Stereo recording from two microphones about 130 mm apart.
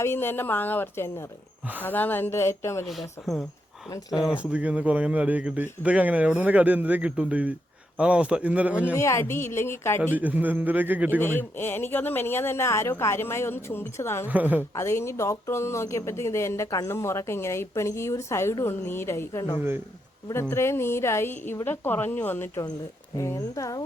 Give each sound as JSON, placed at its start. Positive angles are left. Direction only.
{"t": 0.0, "sound": "speech", "side_deg": 15}
{"t": 2.8, "sound": "a man's voice", "side_deg": 0}
{"t": 9.0, "sound": "speech", "side_deg": 20}
{"t": 10.2, "sound": "a man's voice", "side_deg": -15}
{"t": 11.2, "sound": "speech", "side_deg": 15}
{"t": 14.3, "sound": "a man's voice", "side_deg": -15}
{"t": 14.8, "sound": "speech", "side_deg": 20}
{"t": 19.5, "sound": "a man's voice", "side_deg": -15}
{"t": 20.3, "sound": "speech", "side_deg": 20}